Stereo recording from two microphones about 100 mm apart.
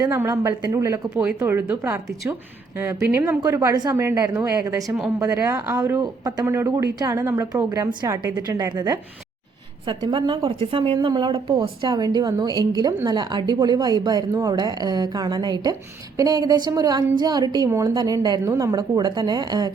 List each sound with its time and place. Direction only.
0.2 s a woman's voice: 30° right (ahead or behind)
1.1 s speech: 5° right (ahead or behind)
1.4 s a woman's voice: 20° right (ahead or behind)
3.4 s a woman's voice: 35° right (ahead or behind)
3.9 s a woman's voice: 25° right (ahead or behind)
6.0 s a woman's voice: 40° right (ahead or behind)
6.4 s a woman's voice: 25° right (ahead or behind)
6.7 s a woman's voice: 35° right (ahead or behind)
9.8 s a woman's voice: 55° right (ahead or behind)
10.9 s a woman's voice: 45° right (ahead or behind)
17.7 s a woman's voice: 30° right (ahead or behind)
17.9 s a woman's voice: 45° right (ahead or behind)